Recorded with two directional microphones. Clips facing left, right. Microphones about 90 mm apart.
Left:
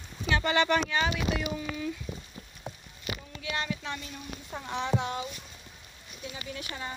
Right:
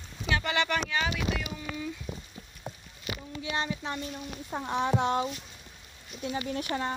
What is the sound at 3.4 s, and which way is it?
Speech, 25° right (ahead or behind).